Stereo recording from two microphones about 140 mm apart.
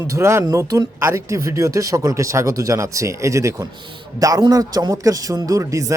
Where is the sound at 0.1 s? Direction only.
20° right (ahead or behind).